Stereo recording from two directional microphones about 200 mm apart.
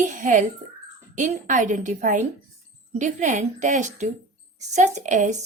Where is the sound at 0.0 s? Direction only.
40° right (ahead or behind).